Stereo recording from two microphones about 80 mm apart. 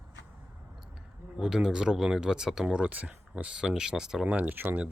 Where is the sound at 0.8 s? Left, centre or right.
Centre.